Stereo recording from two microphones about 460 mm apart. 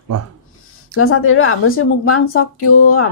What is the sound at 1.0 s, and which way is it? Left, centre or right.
A woman's voice, left.